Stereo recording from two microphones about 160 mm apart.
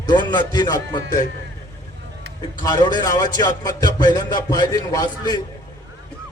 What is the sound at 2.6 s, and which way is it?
Speech, 25° left (ahead or behind).